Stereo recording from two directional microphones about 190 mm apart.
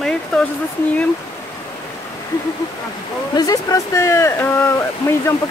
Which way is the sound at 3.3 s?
20° left (ahead or behind).